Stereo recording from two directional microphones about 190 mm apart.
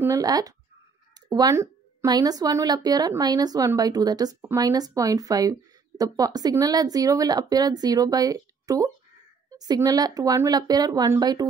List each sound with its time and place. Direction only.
0.0 s a woman's voice: 15° right (ahead or behind)